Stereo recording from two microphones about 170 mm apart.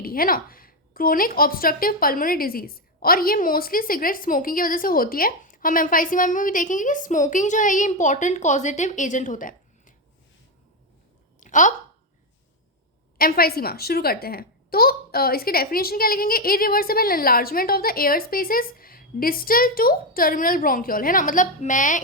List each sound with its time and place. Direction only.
0.0 s a woman's voice: 60° left (ahead or behind)
11.3 s a sound: 50° left (ahead or behind)
13.1 s a woman's voice: 60° left (ahead or behind)